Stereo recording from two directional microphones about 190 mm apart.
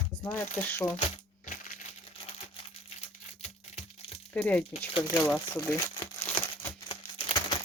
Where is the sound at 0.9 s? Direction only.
30° left (ahead or behind).